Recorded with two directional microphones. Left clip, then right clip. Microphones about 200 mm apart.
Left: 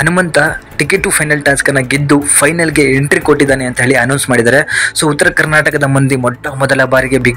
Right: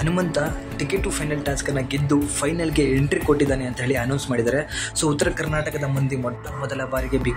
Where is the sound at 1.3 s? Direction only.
20° left (ahead or behind).